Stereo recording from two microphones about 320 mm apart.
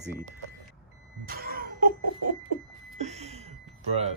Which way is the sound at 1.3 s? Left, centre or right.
Right.